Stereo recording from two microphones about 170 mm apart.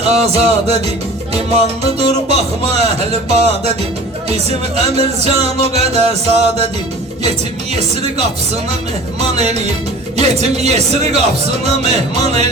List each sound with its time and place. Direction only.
0.1 s speech: 40° right (ahead or behind)
7.8 s speech: 40° right (ahead or behind)
9.3 s speech: 40° right (ahead or behind)